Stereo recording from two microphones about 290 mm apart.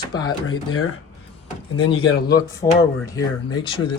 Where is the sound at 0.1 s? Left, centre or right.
Centre.